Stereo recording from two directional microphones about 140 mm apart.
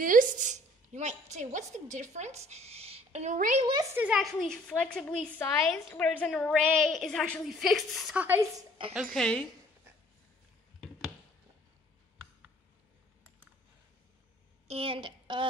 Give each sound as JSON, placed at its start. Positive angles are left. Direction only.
{"t": 0.0, "sound": "a sound", "side_deg": -75}
{"t": 3.9, "sound": "a woman's voice", "side_deg": -10}
{"t": 4.2, "sound": "a woman's voice", "side_deg": 5}
{"t": 8.2, "sound": "a woman's voice", "side_deg": -15}
{"t": 8.5, "sound": "a woman's voice", "side_deg": -35}
{"t": 8.9, "sound": "a woman's voice", "side_deg": 0}
{"t": 14.7, "sound": "a woman's voice", "side_deg": -40}